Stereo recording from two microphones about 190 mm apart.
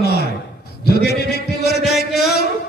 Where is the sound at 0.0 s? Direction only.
60° left (ahead or behind).